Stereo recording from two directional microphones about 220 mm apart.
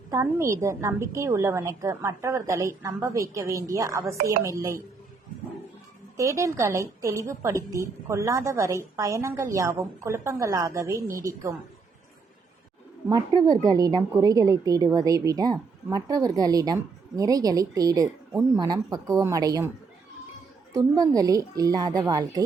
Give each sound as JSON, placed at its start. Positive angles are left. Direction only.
{"t": 0.1, "sound": "a woman's voice", "side_deg": -10}
{"t": 6.1, "sound": "a woman's voice", "side_deg": -15}
{"t": 13.1, "sound": "a woman's voice", "side_deg": -15}
{"t": 20.7, "sound": "a woman's voice", "side_deg": -15}